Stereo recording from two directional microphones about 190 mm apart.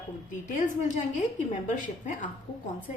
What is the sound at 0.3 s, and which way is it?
A woman's voice, 45° left (ahead or behind).